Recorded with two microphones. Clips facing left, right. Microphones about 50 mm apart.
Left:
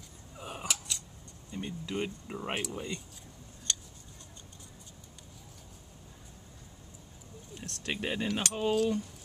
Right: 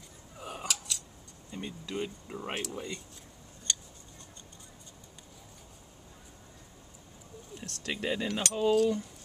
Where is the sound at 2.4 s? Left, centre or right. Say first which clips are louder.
Left 1 dB; centre.